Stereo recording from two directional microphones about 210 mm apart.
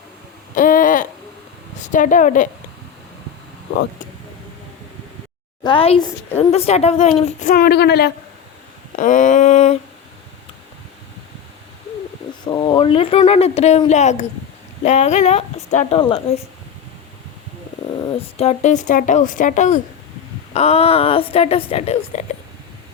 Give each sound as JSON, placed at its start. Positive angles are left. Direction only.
{"t": 0.5, "sound": "a sound", "side_deg": 40}
{"t": 1.9, "sound": "speech", "side_deg": 40}
{"t": 5.6, "sound": "speech", "side_deg": 25}
{"t": 9.0, "sound": "speech", "side_deg": 40}
{"t": 12.5, "sound": "speech", "side_deg": 20}
{"t": 18.2, "sound": "speech", "side_deg": 30}